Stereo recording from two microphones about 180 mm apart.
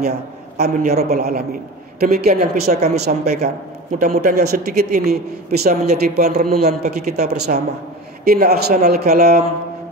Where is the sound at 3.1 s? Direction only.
45° right (ahead or behind).